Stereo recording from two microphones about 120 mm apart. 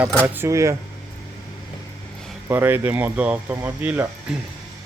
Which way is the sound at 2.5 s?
20° right (ahead or behind).